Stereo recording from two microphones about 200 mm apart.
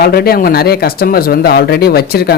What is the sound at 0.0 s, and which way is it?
A man's voice, 50° left (ahead or behind).